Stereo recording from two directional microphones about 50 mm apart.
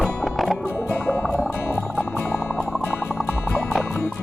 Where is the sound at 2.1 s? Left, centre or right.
Left.